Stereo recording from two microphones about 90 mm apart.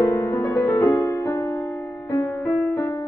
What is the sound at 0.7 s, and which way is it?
Music, 35° left (ahead or behind).